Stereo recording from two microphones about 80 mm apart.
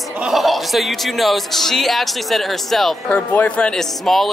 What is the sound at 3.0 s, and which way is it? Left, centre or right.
Speech, centre.